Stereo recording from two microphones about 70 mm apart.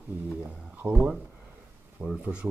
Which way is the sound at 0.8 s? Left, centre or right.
Right.